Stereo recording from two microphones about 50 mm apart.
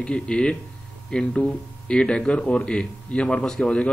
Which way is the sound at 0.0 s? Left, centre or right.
Left.